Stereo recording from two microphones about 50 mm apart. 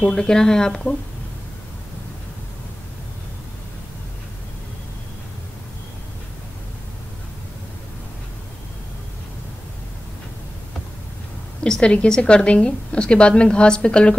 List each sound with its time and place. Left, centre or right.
0.1 s speech: centre
11.6 s a woman's voice: centre